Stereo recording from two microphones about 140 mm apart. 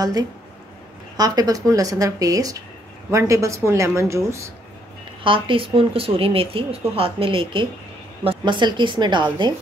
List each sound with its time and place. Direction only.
0.0 s speech: 25° right (ahead or behind)
5.2 s speech: 40° right (ahead or behind)